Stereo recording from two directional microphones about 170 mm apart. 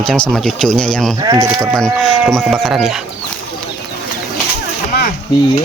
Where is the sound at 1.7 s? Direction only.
Centre (ahead or behind).